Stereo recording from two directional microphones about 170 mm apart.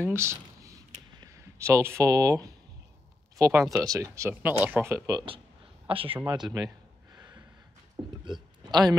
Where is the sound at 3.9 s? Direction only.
20° right (ahead or behind).